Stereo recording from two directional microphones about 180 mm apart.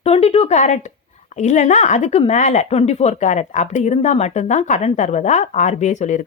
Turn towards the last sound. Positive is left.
turn(degrees=40)  # may be behind; listen again after turning